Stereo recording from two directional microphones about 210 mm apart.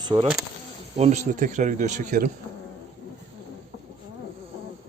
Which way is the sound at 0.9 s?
30° right (ahead or behind).